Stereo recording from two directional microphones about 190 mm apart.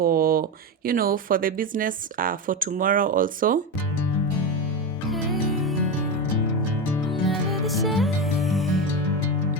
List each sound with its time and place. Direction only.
0.0 s a sound: 50° right (ahead or behind)
0.9 s speech: 50° right (ahead or behind)
5.1 s music: centre (ahead or behind)
7.1 s music: centre (ahead or behind)